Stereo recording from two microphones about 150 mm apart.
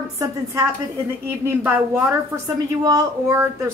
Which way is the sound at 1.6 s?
15° right (ahead or behind).